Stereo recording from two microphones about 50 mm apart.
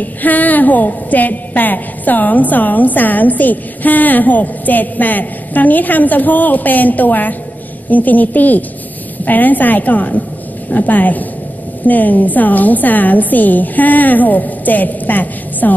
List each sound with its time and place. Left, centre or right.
0.0 s a woman's voice: left